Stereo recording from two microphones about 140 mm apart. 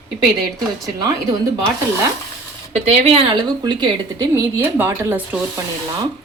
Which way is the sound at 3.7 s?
30° right (ahead or behind).